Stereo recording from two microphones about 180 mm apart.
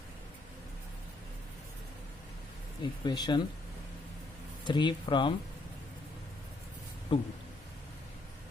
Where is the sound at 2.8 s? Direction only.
25° left (ahead or behind).